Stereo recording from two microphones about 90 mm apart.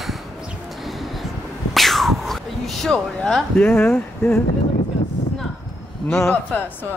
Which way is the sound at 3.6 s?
25° left (ahead or behind).